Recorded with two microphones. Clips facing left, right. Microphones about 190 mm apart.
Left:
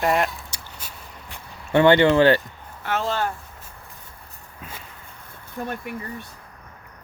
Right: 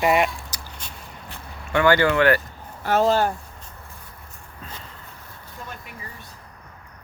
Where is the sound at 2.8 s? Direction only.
40° right (ahead or behind).